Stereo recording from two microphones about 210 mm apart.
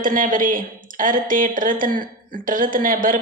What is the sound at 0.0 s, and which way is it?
Speech, 40° right (ahead or behind).